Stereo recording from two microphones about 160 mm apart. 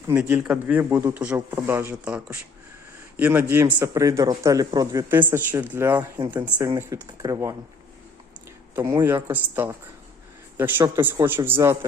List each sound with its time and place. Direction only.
0.1 s speech: 10° right (ahead or behind)
8.7 s speech: 20° right (ahead or behind)